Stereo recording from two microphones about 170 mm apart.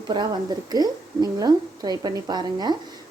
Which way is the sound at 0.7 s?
25° right (ahead or behind).